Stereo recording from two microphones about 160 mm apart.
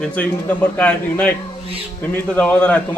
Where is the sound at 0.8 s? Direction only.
10° left (ahead or behind).